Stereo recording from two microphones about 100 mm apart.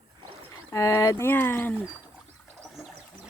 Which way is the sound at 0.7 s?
30° left (ahead or behind).